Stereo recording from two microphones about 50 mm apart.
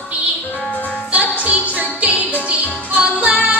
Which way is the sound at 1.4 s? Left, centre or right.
Right.